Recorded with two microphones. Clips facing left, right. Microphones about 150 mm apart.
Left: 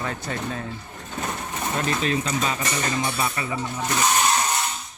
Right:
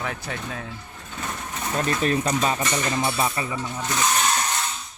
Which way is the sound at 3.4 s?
25° right (ahead or behind).